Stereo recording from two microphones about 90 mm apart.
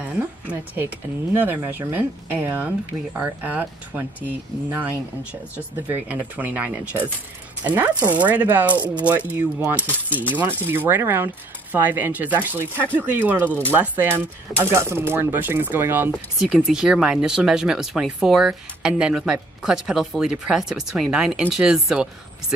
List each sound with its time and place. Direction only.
0.1 s speech: 15° right (ahead or behind)
7.7 s speech: 30° right (ahead or behind)
8.1 s speech: 15° right (ahead or behind)
16.3 s speech: 5° right (ahead or behind)